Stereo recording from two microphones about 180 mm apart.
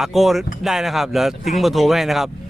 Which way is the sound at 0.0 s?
Centre (ahead or behind).